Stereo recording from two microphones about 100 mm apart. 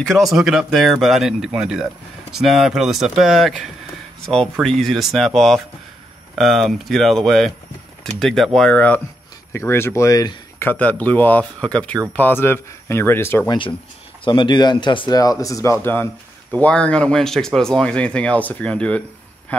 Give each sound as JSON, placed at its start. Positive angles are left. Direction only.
{"t": 0.0, "sound": "speech", "side_deg": 0}
{"t": 9.5, "sound": "speech", "side_deg": 25}
{"t": 10.6, "sound": "speech", "side_deg": 20}
{"t": 14.2, "sound": "speech", "side_deg": 55}
{"t": 15.1, "sound": "speech", "side_deg": 35}
{"t": 16.5, "sound": "speech", "side_deg": 15}